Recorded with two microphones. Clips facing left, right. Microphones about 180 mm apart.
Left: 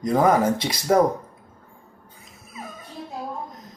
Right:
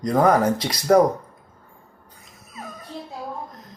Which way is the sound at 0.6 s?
25° left (ahead or behind).